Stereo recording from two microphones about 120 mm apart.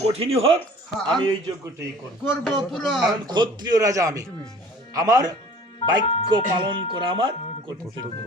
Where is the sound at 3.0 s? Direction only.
40° right (ahead or behind).